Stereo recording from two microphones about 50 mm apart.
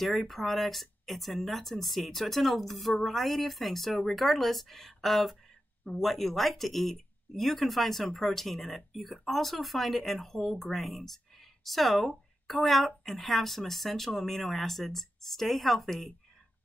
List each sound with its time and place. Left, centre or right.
0.0 s speech: centre